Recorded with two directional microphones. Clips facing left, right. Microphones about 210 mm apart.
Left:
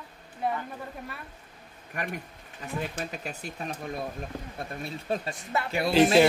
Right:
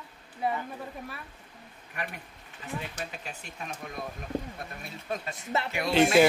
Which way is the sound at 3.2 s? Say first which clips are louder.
Left 5 dB; 35° left (ahead or behind).